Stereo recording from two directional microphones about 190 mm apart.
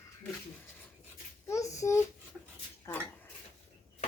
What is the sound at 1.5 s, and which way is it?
Speech, 15° left (ahead or behind).